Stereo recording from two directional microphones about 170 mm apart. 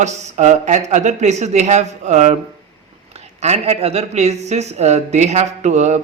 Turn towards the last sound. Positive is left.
turn(degrees=-45)  # may be behind; listen again after turning